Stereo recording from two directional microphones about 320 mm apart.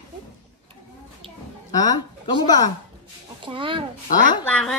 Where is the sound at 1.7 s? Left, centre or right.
Centre.